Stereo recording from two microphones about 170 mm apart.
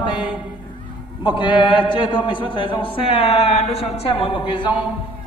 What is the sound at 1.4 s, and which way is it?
A man's voice, 30° left (ahead or behind).